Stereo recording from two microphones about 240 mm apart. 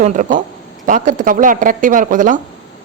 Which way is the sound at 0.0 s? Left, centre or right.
Right.